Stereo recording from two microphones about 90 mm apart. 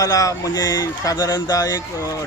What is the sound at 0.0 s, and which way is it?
A man's voice, 40° left (ahead or behind).